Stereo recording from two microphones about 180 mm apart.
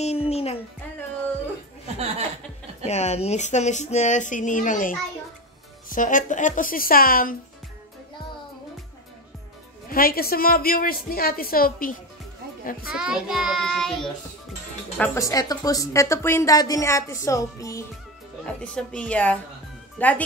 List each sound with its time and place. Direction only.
0.0 s music: 35° left (ahead or behind)
2.0 s chuckle: 35° right (ahead or behind)
2.8 s speech: 40° left (ahead or behind)
9.8 s a woman's voice: 55° left (ahead or behind)
12.8 s child singing: 5° right (ahead or behind)
15.0 s a woman's voice: 20° left (ahead or behind)
18.6 s a woman's voice: 5° left (ahead or behind)